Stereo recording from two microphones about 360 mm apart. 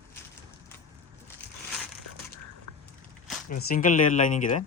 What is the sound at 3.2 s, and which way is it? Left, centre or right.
Speech, left.